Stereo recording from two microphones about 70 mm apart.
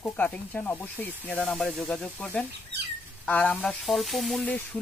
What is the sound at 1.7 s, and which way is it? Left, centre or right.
Speech, centre.